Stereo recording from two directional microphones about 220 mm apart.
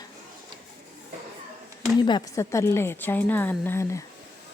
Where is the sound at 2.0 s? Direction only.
20° left (ahead or behind).